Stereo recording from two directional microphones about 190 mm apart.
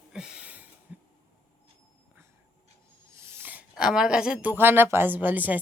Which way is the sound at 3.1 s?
15° right (ahead or behind).